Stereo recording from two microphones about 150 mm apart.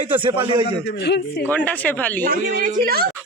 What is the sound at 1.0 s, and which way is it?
Speech, 90° left.